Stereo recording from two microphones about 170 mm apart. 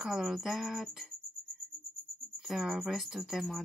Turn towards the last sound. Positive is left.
turn(degrees=0)  # may be behind; listen again after turning